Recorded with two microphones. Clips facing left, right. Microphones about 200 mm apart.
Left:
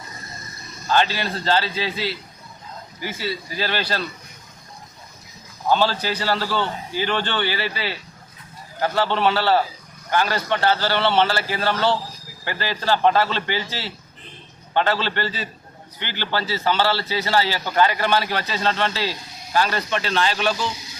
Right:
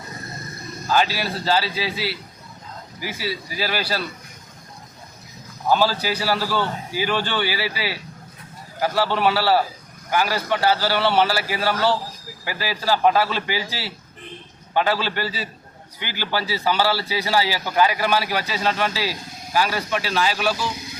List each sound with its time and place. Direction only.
0.9 s a man's voice: 5° right (ahead or behind)
5.6 s a man's voice: 5° right (ahead or behind)
20.7 s a sound: 55° right (ahead or behind)